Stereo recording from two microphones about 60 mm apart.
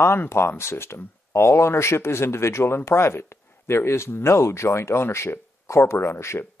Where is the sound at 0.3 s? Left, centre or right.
Left.